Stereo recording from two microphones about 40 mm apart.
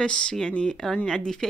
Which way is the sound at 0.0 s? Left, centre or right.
Left.